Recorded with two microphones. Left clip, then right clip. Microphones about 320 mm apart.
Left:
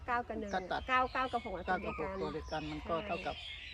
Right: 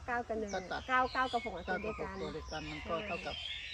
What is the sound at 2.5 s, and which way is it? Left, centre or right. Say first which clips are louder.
Speech: even; left.